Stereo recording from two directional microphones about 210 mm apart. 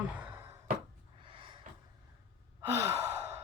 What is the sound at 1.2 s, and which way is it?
Snort, 25° right (ahead or behind).